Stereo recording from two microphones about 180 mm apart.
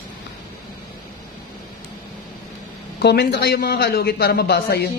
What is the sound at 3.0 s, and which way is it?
A man's voice, 65° left (ahead or behind).